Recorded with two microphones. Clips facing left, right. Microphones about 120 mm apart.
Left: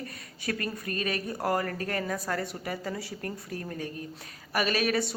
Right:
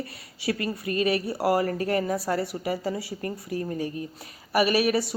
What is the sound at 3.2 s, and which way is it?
Speech, 10° right (ahead or behind).